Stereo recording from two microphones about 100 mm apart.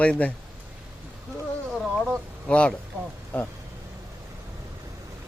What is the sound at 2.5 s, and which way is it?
Speech, 10° left (ahead or behind).